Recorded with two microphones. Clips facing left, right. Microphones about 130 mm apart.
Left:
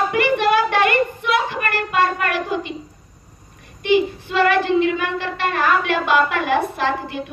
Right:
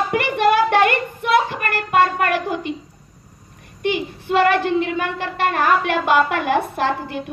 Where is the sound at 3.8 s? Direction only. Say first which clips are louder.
Left 4 dB; 50° right (ahead or behind).